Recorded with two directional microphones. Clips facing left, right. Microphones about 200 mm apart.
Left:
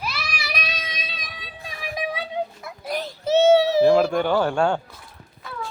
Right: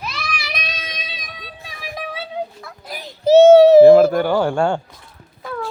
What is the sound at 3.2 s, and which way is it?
Child singing, 40° right (ahead or behind).